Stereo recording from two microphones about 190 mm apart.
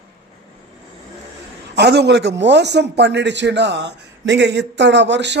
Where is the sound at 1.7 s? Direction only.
60° right (ahead or behind).